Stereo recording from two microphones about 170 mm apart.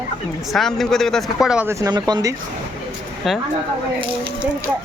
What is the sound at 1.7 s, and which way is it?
Speech, 20° right (ahead or behind).